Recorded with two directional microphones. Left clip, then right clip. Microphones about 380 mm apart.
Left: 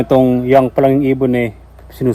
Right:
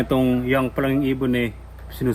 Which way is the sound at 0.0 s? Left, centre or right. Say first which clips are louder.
Left 9 dB; centre.